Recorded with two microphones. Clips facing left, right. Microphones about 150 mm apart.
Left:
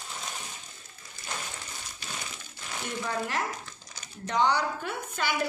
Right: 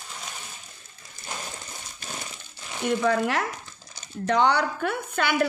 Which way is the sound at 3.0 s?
75° right (ahead or behind).